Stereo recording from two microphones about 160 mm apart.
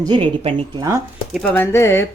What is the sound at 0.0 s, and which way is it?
Speech, 30° right (ahead or behind).